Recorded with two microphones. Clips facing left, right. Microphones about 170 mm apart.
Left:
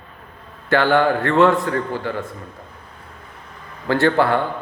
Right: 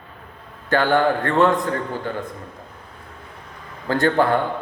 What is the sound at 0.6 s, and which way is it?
A man's voice, 15° right (ahead or behind).